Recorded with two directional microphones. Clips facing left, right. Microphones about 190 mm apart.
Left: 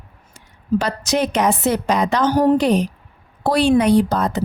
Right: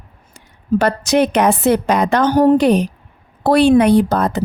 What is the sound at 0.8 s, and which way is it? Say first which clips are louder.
A woman's voice: right 9 dB; 60° right (ahead or behind).